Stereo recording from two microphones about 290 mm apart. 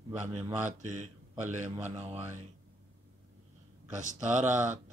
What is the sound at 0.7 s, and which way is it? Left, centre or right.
Speech, right.